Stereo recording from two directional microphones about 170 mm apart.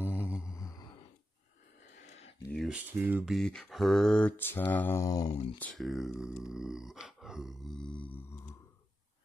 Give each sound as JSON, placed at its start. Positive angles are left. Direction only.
{"t": 0.2, "sound": "mantra", "side_deg": 15}
{"t": 0.6, "sound": "sigh", "side_deg": 20}
{"t": 2.5, "sound": "speech", "side_deg": -5}
{"t": 3.3, "sound": "speech", "side_deg": 5}
{"t": 4.7, "sound": "mantra", "side_deg": 15}
{"t": 5.3, "sound": "speech", "side_deg": 35}
{"t": 5.6, "sound": "speech", "side_deg": 0}